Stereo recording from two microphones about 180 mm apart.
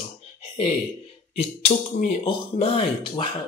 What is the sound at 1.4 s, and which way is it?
A man's voice, 35° left (ahead or behind).